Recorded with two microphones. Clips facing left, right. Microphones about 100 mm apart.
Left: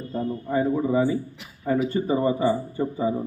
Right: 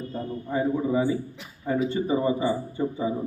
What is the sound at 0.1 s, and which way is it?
Speech, 15° left (ahead or behind).